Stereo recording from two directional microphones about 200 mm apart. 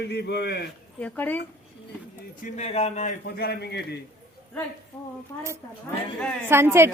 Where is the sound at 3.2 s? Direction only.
50° left (ahead or behind).